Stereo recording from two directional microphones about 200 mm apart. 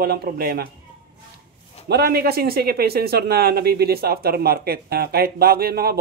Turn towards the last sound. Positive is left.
turn(degrees=-50)  # may be behind; listen again after turning